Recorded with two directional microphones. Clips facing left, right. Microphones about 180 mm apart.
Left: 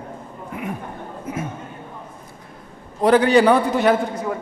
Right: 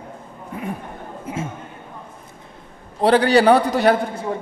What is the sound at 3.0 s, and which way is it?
A woman's voice, 30° right (ahead or behind).